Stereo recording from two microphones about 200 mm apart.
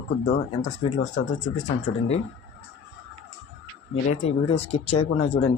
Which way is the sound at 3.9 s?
30° left (ahead or behind).